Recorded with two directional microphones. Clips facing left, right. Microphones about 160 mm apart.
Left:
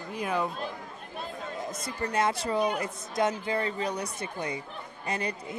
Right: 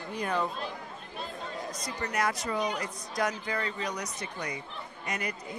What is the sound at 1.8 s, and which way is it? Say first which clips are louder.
A woman's voice: left 3 dB; 25° left (ahead or behind).